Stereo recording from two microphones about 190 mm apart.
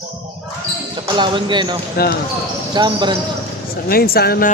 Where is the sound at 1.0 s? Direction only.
25° right (ahead or behind).